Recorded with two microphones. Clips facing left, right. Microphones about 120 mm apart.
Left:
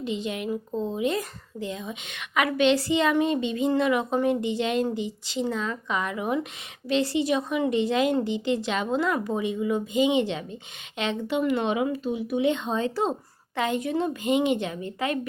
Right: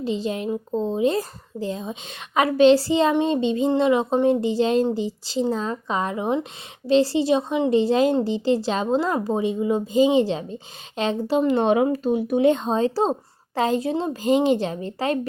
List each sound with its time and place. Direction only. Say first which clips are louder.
0.0 s speech: right 4 dB; 35° right (ahead or behind)